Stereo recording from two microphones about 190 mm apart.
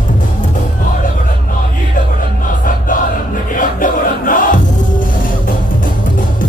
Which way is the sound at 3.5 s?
45° left (ahead or behind).